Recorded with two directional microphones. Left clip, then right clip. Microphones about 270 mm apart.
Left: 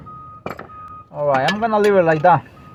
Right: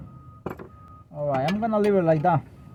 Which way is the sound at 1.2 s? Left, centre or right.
Left.